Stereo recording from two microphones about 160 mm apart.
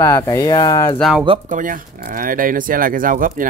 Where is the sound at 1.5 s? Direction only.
55° right (ahead or behind).